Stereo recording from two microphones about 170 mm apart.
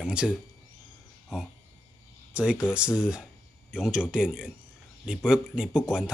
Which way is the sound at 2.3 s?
5° right (ahead or behind).